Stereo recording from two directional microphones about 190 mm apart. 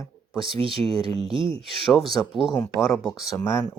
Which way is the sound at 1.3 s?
25° right (ahead or behind).